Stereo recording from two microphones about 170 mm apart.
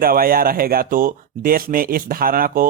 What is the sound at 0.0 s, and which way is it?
Speech, 60° right (ahead or behind).